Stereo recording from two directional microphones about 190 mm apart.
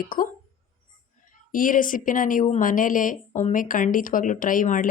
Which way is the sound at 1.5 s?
45° left (ahead or behind).